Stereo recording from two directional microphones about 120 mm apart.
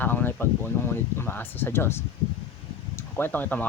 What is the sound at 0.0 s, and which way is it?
Speech, 15° left (ahead or behind).